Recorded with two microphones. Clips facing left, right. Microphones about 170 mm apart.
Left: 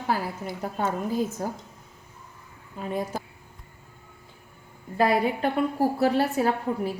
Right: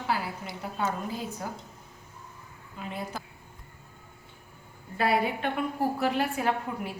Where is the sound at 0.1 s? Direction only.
45° left (ahead or behind).